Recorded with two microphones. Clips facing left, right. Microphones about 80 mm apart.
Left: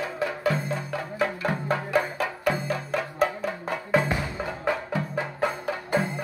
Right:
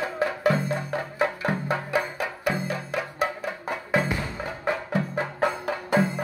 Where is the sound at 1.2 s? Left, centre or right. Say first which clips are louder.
Right 1 dB; centre.